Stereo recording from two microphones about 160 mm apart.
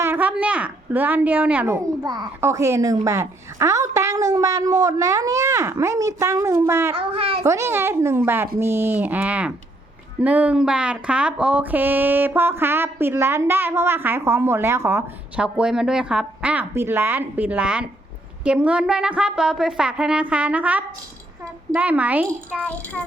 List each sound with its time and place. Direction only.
0.0 s a sound: 10° right (ahead or behind)
2.0 s a woman's voice: 20° right (ahead or behind)
7.0 s a child's voice: 35° right (ahead or behind)
7.4 s speech: 15° right (ahead or behind)
15.5 s a child's voice: 5° right (ahead or behind)